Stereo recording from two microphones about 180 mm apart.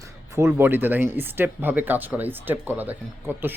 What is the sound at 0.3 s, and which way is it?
Speech, 15° right (ahead or behind).